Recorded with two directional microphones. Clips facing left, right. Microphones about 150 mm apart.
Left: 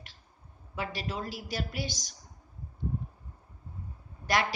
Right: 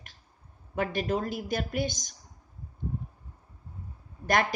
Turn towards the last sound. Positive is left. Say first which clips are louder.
# right 3 dB
turn(degrees=-50)  # may be behind; listen again after turning